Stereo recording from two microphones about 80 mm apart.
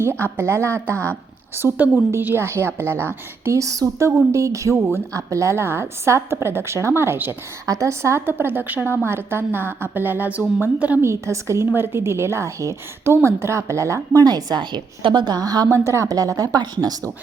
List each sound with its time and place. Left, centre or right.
0.0 s a woman's voice: right
7.7 s a woman's voice: right; by 11.0 s centre
11.0 s a woman's voice: right
15.7 s a woman's voice: right